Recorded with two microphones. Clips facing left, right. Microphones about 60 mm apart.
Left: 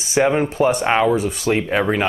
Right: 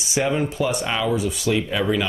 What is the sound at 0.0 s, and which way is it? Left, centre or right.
Speech, left.